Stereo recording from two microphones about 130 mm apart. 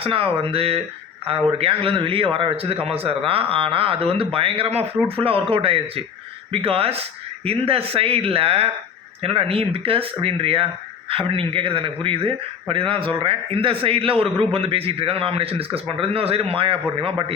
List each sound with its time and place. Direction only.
0.0 s a man's voice: 45° right (ahead or behind)